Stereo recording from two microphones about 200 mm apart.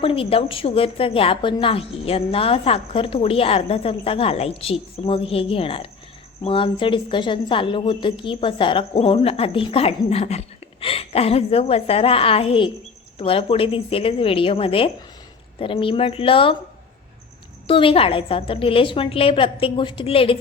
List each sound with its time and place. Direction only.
0.0 s a woman's voice: 25° left (ahead or behind)
17.7 s a woman's voice: 25° left (ahead or behind)